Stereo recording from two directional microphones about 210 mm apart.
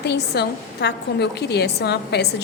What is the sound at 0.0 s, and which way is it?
A woman's voice, 50° left (ahead or behind).